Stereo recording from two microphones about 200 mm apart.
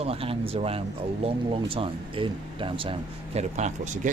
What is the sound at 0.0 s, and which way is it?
Speech, 30° right (ahead or behind).